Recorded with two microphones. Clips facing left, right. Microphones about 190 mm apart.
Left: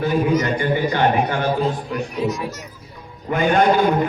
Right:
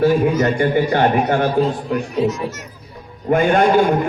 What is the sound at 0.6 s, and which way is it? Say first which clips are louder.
Speech: right 3 dB; 50° right (ahead or behind).